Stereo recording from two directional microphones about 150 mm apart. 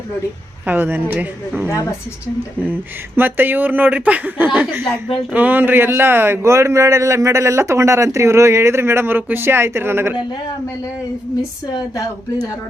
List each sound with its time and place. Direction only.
0.6 s speech: 15° right (ahead or behind)
3.2 s speech: 15° right (ahead or behind)
4.8 s a woman's voice: 35° left (ahead or behind)
5.3 s speech: 10° right (ahead or behind)